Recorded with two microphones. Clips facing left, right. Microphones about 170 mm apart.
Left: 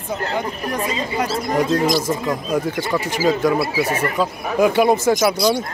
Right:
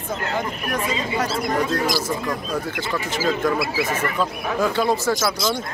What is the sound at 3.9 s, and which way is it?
A man's voice, 15° left (ahead or behind).